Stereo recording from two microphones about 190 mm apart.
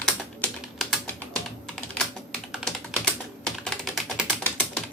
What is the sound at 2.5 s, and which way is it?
Typing, centre (ahead or behind).